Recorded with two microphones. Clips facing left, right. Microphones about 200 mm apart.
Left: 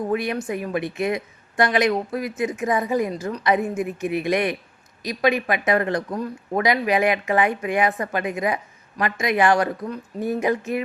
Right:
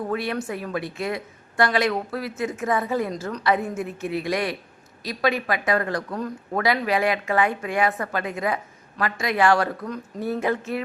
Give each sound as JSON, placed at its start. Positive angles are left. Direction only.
{"t": 0.1, "sound": "speech", "side_deg": 15}